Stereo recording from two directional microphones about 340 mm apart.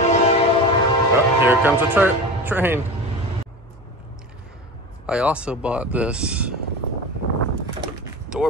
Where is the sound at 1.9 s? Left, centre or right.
Centre.